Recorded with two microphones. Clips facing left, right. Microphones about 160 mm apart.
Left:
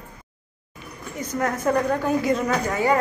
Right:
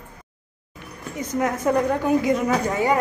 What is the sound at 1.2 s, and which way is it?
A woman's voice, 15° right (ahead or behind).